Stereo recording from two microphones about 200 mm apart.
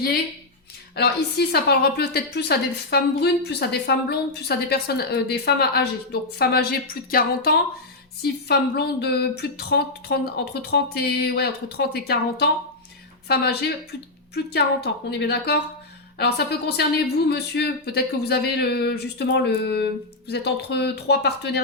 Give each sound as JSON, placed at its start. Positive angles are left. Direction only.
{"t": 0.9, "sound": "a woman's voice", "side_deg": 55}